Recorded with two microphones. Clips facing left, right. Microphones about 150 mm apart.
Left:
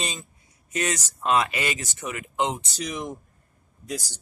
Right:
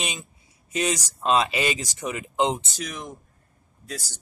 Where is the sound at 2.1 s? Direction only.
25° right (ahead or behind).